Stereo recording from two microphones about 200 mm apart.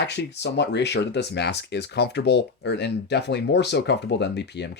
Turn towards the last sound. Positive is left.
turn(degrees=60)  # may be behind; listen again after turning